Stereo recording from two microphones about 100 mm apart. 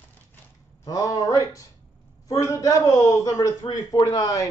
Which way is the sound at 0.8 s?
35° left (ahead or behind).